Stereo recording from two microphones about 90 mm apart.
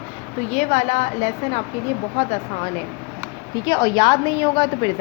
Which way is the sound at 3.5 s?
45° left (ahead or behind).